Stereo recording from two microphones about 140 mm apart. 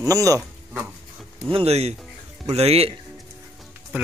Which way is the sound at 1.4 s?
45° right (ahead or behind).